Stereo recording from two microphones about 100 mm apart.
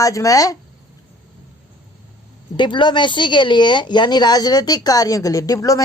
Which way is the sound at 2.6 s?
50° left (ahead or behind).